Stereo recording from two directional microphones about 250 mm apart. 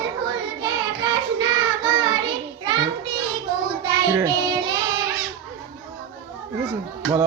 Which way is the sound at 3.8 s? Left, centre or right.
Centre.